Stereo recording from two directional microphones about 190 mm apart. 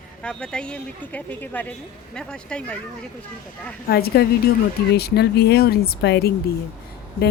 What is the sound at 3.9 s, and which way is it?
Speech, 55° left (ahead or behind).